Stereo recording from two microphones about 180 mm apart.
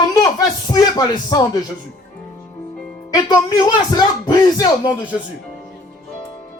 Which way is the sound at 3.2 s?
25° left (ahead or behind).